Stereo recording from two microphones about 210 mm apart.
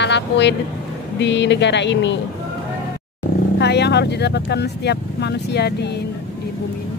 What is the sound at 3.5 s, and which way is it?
Speech, 55° left (ahead or behind).